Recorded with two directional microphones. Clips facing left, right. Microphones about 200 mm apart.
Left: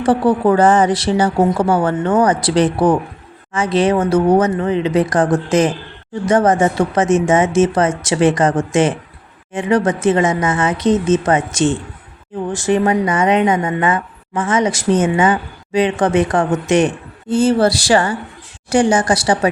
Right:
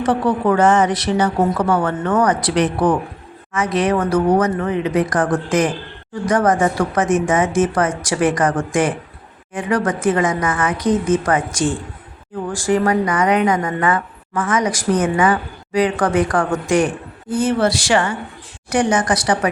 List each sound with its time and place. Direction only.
0.0 s speech: 30° left (ahead or behind)